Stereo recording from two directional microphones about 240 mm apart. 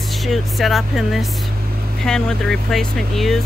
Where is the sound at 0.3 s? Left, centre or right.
Centre.